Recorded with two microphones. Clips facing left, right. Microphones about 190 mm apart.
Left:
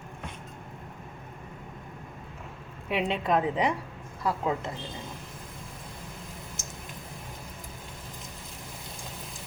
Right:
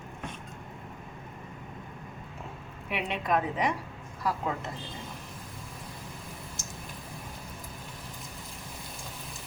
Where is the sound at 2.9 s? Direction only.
30° left (ahead or behind).